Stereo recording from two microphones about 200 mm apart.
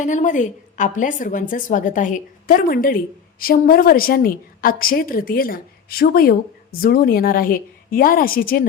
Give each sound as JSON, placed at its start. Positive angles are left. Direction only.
{"t": 0.0, "sound": "a woman's voice", "side_deg": 40}